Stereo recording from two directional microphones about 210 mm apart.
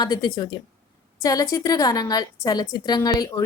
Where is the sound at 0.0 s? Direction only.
20° left (ahead or behind).